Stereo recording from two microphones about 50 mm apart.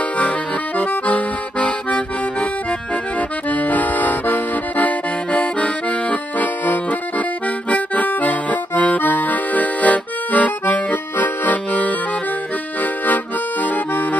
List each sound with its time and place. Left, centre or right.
0.7 s accordion: left
3.2 s accordion: left
13.0 s accordion: left